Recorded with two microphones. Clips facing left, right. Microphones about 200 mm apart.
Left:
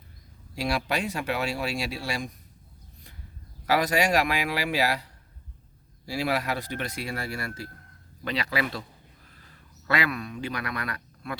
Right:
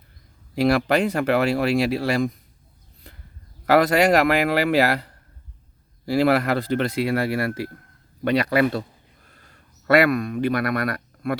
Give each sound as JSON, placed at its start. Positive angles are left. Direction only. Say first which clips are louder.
{"t": 0.7, "sound": "speech", "louder": "right 8 dB", "side_deg": -55}
{"t": 3.7, "sound": "speech", "louder": "right 7 dB", "side_deg": -60}
{"t": 9.2, "sound": "a sound", "louder": "right 1 dB", "side_deg": -45}